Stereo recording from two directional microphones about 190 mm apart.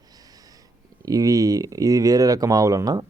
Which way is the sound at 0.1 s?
20° right (ahead or behind).